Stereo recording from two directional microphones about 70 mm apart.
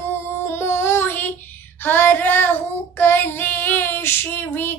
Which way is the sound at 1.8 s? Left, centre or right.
Left.